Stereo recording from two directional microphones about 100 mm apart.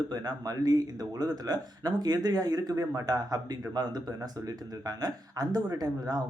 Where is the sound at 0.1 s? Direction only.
40° right (ahead or behind).